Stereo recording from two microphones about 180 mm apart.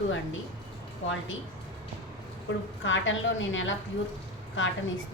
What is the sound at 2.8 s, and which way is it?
A woman's voice, 90° left.